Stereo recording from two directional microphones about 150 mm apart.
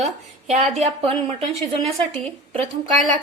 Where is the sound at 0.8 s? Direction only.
40° right (ahead or behind).